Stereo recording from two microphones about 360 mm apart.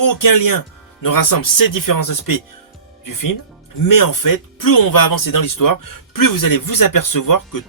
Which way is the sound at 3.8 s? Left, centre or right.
Left.